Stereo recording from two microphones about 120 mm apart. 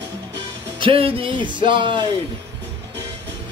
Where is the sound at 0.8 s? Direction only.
50° right (ahead or behind).